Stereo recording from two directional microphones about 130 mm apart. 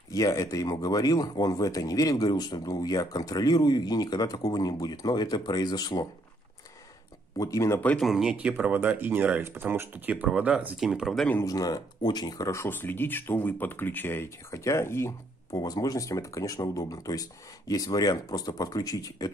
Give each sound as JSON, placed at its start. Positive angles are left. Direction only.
{"t": 0.1, "sound": "speech", "side_deg": 25}
{"t": 7.3, "sound": "speech", "side_deg": 25}
{"t": 8.0, "sound": "speech", "side_deg": -5}
{"t": 11.4, "sound": "speech", "side_deg": 30}